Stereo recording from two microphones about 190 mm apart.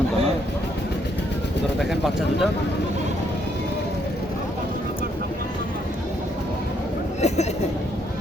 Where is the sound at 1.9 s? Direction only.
Centre (ahead or behind).